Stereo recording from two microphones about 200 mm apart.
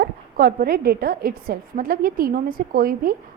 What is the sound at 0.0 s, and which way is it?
A woman's voice, 50° right (ahead or behind).